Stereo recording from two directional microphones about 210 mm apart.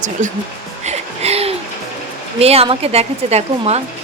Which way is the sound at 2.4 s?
30° right (ahead or behind).